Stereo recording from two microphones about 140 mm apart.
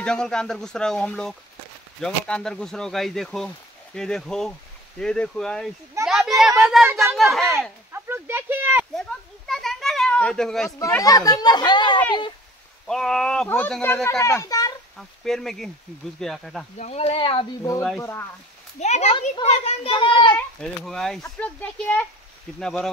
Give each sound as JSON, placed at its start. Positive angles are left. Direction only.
{"t": 0.0, "sound": "speech", "side_deg": 5}
{"t": 6.0, "sound": "a sound", "side_deg": -5}
{"t": 6.8, "sound": "speech", "side_deg": -15}
{"t": 7.2, "sound": "speech", "side_deg": 0}
{"t": 7.9, "sound": "a sound", "side_deg": -15}
{"t": 8.9, "sound": "children playing", "side_deg": 0}
{"t": 10.8, "sound": "speech", "side_deg": 25}
{"t": 12.8, "sound": "a child's voice", "side_deg": 5}
{"t": 15.0, "sound": "speech", "side_deg": 0}
{"t": 16.7, "sound": "speech", "side_deg": 50}
{"t": 17.6, "sound": "speech", "side_deg": 20}
{"t": 18.8, "sound": "a child's voice", "side_deg": 55}
{"t": 20.3, "sound": "speech", "side_deg": 5}